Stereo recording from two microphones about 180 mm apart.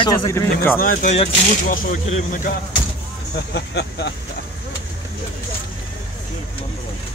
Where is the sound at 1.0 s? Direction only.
40° left (ahead or behind).